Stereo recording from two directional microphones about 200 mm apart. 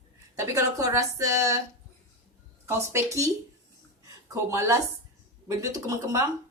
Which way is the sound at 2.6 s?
15° right (ahead or behind).